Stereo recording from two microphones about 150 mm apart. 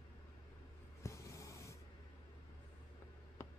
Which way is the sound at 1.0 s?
20° left (ahead or behind).